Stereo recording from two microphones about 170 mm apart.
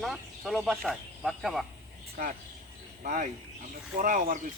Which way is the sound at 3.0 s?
50° right (ahead or behind).